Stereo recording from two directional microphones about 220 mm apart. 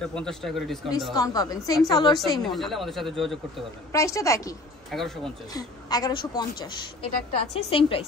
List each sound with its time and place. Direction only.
0.0 s speech: centre (ahead or behind)
1.1 s a woman's voice: 15° left (ahead or behind)
2.3 s speech: centre (ahead or behind)
3.9 s a woman's voice: 15° left (ahead or behind)
4.9 s speech: centre (ahead or behind)
5.5 s a woman's voice: 15° left (ahead or behind)